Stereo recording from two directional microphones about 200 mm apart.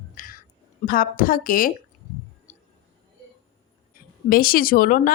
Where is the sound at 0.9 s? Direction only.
45° left (ahead or behind).